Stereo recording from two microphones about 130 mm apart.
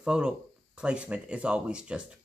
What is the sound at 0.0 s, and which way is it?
Speech, 5° right (ahead or behind).